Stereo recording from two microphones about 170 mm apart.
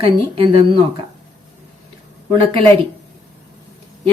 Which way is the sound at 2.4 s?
35° right (ahead or behind).